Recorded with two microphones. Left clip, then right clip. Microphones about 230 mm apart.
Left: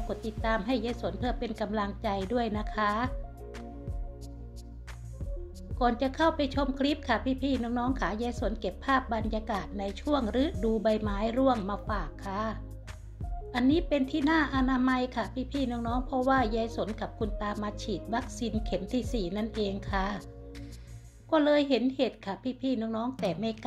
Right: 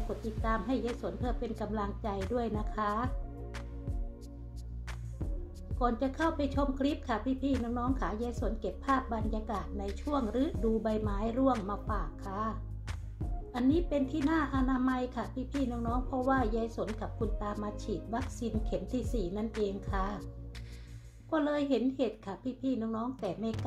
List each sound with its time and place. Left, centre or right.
0.4 s a woman's voice: centre
5.8 s a woman's voice: centre
21.3 s a woman's voice: centre